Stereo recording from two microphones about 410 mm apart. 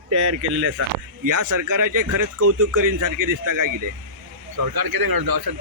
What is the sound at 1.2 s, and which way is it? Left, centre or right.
Speech, right.